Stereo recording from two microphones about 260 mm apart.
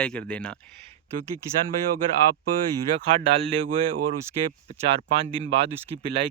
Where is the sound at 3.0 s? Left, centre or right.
Right.